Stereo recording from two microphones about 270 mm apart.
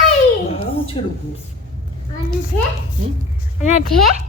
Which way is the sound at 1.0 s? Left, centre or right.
Centre.